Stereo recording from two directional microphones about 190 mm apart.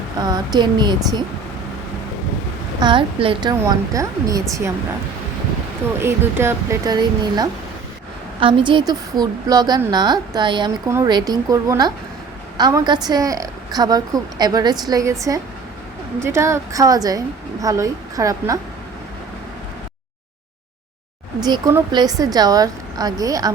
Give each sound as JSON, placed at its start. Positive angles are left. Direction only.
{"t": 0.2, "sound": "a woman's voice", "side_deg": -20}
{"t": 2.8, "sound": "a woman's voice", "side_deg": -25}
{"t": 6.0, "sound": "a woman's voice", "side_deg": -15}
{"t": 21.4, "sound": "a woman's voice", "side_deg": -20}